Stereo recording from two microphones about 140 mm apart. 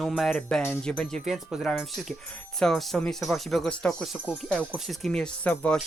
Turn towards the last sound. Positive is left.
turn(degrees=10)  # may be behind; listen again after turning